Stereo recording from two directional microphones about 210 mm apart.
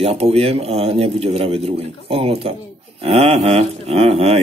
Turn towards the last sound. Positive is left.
turn(degrees=-30)  # may be behind; listen again after turning